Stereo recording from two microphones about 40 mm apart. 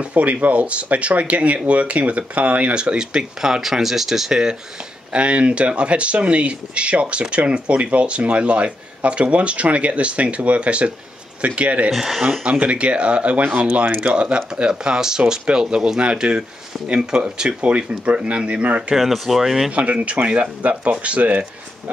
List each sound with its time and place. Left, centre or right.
0.0 s speech: right
2.8 s speech: right
4.3 s speech: centre
5.1 s speech: right
12.0 s speech: centre
12.4 s speech: right
18.9 s speech: centre
19.7 s speech: right